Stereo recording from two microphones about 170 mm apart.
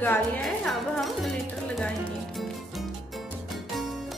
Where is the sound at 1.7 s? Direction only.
5° left (ahead or behind).